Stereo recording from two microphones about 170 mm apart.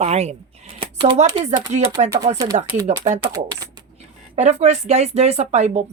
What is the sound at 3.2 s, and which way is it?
Speech, 20° right (ahead or behind).